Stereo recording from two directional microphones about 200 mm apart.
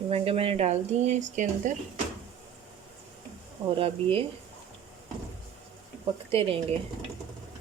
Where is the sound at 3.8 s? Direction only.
30° right (ahead or behind).